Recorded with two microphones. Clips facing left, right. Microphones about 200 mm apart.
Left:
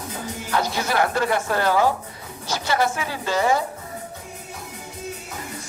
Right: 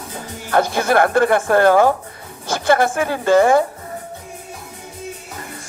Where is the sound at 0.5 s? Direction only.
55° right (ahead or behind).